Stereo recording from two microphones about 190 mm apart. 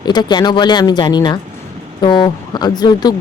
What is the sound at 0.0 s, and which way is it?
Speech, 20° left (ahead or behind).